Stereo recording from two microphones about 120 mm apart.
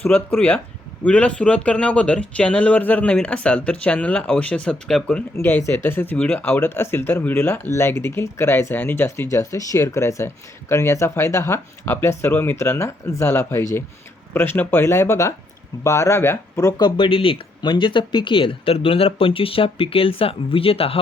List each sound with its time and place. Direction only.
0.0 s speech: 10° left (ahead or behind)
5.4 s speech: 20° left (ahead or behind)
17.0 s speech: 50° left (ahead or behind)